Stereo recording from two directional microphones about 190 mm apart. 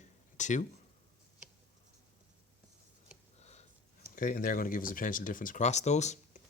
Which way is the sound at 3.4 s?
35° left (ahead or behind).